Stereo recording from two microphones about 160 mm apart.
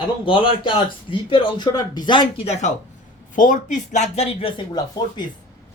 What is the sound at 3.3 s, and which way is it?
Speech, 55° left (ahead or behind).